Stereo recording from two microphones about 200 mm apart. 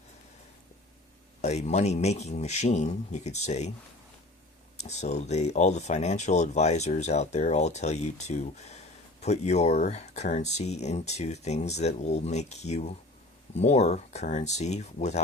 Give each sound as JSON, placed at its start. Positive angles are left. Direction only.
{"t": 1.4, "sound": "speech", "side_deg": 35}
{"t": 4.8, "sound": "speech", "side_deg": 35}